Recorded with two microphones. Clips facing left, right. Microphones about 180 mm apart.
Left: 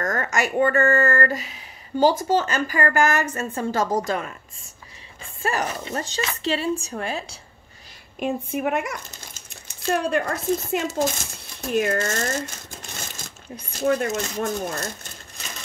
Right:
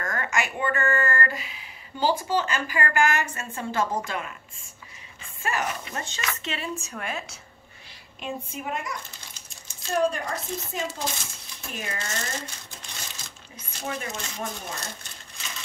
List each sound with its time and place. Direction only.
0.0 s speech: 45° left (ahead or behind)
5.4 s speech: 35° left (ahead or behind)
8.2 s a woman's voice: 60° left (ahead or behind)
11.7 s crumpling: 60° left (ahead or behind)
13.8 s a woman's voice: 60° left (ahead or behind)
14.1 s speech: 45° left (ahead or behind)